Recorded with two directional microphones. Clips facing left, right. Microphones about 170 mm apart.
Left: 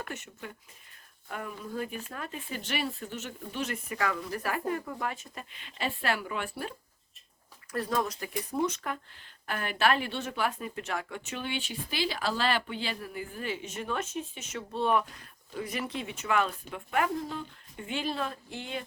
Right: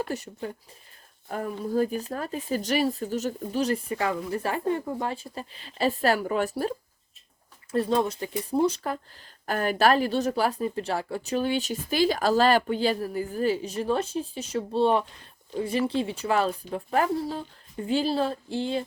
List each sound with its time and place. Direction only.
0.0 s speech: 35° right (ahead or behind)
7.7 s speech: 25° right (ahead or behind)